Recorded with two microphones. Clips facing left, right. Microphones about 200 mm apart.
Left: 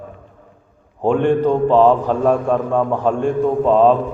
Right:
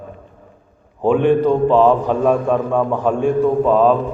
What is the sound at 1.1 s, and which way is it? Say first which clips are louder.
Speech: right 2 dB; 10° right (ahead or behind).